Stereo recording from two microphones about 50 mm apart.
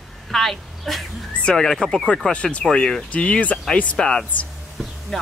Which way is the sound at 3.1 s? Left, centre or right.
Left.